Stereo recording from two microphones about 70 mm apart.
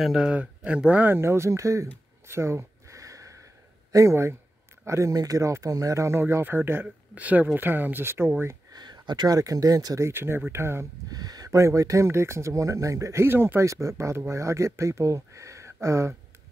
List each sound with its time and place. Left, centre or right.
0.0 s speech: centre
0.7 s speech: centre; by 1.9 s right
2.2 s a sound: right
3.9 s speech: right
5.1 s speech: right
8.7 s speech: right
9.9 s speech: right
11.1 s a sound: right
11.6 s speech: right
13.7 s speech: right